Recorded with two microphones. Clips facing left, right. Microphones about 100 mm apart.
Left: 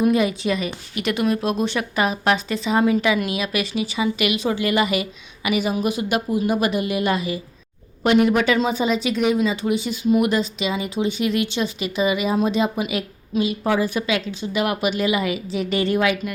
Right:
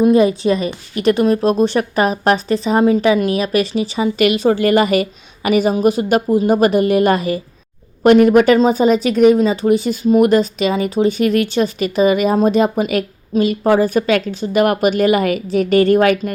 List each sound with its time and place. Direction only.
0.0 s a woman's voice: 35° right (ahead or behind)